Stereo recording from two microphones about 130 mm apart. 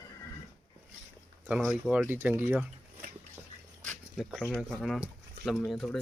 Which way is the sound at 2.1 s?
15° right (ahead or behind).